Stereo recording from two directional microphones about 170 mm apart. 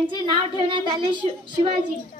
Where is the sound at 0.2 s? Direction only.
30° right (ahead or behind).